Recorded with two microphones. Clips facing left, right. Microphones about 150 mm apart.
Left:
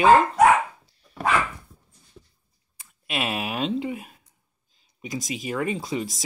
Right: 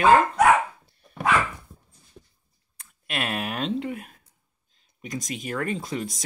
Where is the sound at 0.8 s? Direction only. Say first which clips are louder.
Right 1 dB; 55° right (ahead or behind).